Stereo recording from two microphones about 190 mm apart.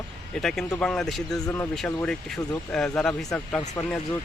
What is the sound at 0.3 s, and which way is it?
Speech, 5° left (ahead or behind).